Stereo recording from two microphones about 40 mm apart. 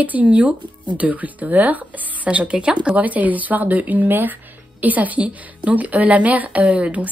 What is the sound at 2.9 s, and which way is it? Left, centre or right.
Speech, right.